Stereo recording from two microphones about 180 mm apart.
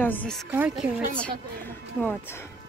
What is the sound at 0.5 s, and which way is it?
Speech, 10° right (ahead or behind).